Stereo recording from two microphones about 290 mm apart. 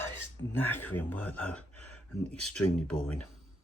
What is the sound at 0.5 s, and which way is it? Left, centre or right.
Speech, centre.